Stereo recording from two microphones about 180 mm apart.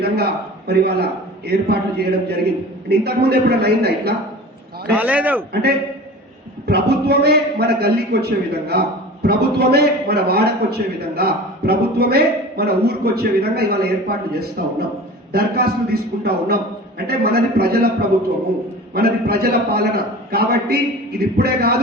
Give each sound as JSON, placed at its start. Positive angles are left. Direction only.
{"t": 0.7, "sound": "a man's voice", "side_deg": -60}
{"t": 4.9, "sound": "a man's voice", "side_deg": -10}
{"t": 6.7, "sound": "a man's voice", "side_deg": -65}
{"t": 18.9, "sound": "a man's voice", "side_deg": -60}